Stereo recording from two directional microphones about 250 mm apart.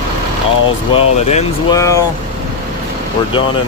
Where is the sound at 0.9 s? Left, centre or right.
Centre.